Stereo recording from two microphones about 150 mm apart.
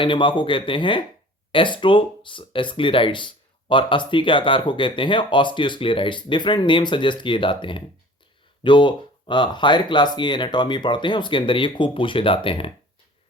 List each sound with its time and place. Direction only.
0.0 s speech: 35° left (ahead or behind)